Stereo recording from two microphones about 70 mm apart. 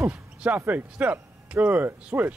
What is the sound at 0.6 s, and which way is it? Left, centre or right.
Speech, right.